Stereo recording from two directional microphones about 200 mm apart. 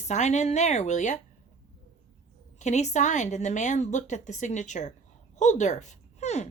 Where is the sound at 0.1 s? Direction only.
35° left (ahead or behind).